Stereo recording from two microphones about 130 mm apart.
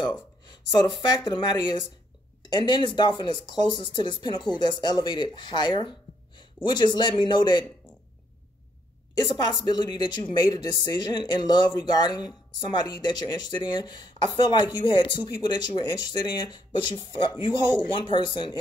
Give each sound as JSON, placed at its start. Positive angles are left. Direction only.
{"t": 0.5, "sound": "speech", "side_deg": 35}
{"t": 9.1, "sound": "speech", "side_deg": 30}